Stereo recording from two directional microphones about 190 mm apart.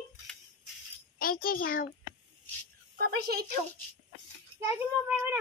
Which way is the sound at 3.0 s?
55° right (ahead or behind).